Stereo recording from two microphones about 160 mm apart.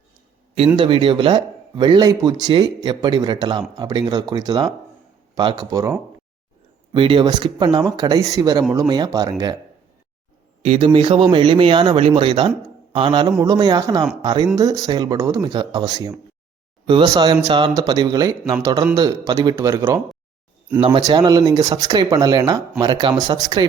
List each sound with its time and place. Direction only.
0.8 s speech: 30° right (ahead or behind)
6.9 s speech: 30° right (ahead or behind)
10.6 s a man's voice: 35° right (ahead or behind); by 20.0 s 20° right (ahead or behind)
21.0 s speech: 25° right (ahead or behind)